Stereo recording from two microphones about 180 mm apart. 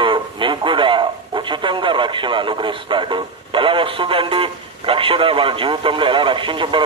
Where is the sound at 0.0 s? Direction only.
25° right (ahead or behind).